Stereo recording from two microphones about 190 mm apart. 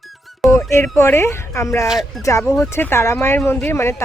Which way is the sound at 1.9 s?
Centre (ahead or behind).